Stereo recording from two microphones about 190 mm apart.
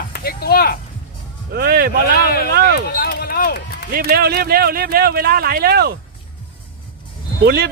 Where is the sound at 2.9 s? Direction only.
50° left (ahead or behind).